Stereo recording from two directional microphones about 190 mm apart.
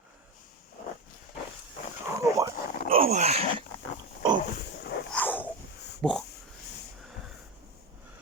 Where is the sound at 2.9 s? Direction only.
35° right (ahead or behind).